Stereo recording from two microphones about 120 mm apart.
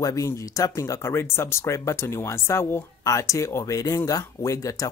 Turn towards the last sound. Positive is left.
turn(degrees=30)  # may be behind; listen again after turning